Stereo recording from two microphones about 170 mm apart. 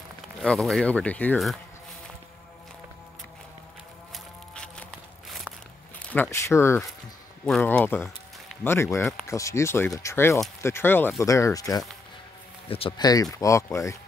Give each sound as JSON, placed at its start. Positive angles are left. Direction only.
{"t": 0.4, "sound": "speech", "side_deg": 5}
{"t": 4.1, "sound": "music", "side_deg": 5}
{"t": 6.1, "sound": "speech", "side_deg": 15}
{"t": 7.4, "sound": "speech", "side_deg": 5}
{"t": 12.6, "sound": "speech", "side_deg": 35}